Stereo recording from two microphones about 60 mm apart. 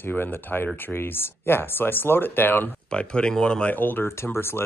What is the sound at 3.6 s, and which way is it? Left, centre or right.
Speech, left.